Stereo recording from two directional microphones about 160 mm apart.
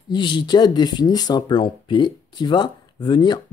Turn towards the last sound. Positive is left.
turn(degrees=30)  # may be behind; listen again after turning